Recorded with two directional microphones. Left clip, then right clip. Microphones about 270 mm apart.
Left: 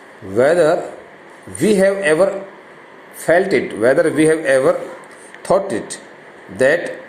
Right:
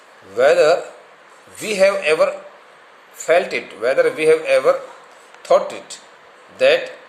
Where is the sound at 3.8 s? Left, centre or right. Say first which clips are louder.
Left 1 dB; centre.